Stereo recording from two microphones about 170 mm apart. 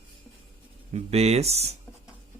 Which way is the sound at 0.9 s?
40° right (ahead or behind).